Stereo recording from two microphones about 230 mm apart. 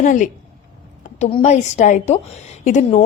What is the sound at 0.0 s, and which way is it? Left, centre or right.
A woman's voice, left.